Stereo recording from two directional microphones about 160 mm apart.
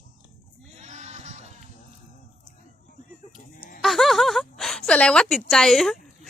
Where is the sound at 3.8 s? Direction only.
Centre (ahead or behind).